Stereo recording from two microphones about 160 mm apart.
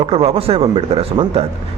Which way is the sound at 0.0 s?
40° right (ahead or behind).